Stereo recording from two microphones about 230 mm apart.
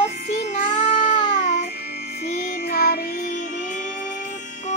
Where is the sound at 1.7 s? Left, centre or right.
Left.